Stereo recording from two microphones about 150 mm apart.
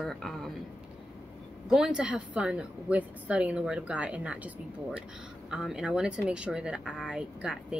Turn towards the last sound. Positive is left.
turn(degrees=-5)  # may be behind; listen again after turning